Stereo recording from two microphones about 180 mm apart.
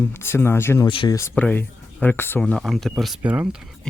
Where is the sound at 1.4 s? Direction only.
10° left (ahead or behind); by 3.5 s 5° right (ahead or behind).